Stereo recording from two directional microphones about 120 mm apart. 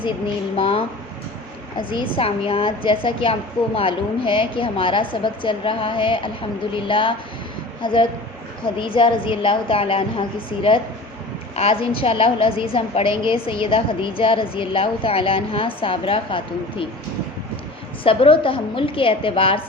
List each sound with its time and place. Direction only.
0.5 s a woman's voice: 50° left (ahead or behind)
1.8 s a woman's voice: 45° left (ahead or behind)
18.0 s a woman's voice: 50° left (ahead or behind)